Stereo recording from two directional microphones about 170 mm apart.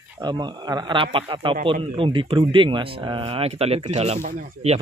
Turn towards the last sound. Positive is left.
turn(degrees=-40)  # may be behind; listen again after turning